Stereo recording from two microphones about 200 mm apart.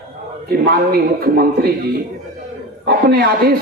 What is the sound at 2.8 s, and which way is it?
Speech, 50° right (ahead or behind).